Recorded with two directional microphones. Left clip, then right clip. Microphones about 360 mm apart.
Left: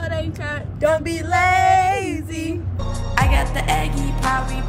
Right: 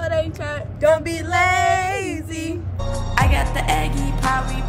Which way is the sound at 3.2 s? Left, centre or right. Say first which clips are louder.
Even; centre.